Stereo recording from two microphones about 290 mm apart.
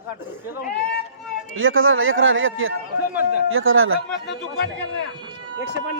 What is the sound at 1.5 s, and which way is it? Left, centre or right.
A man's voice, right.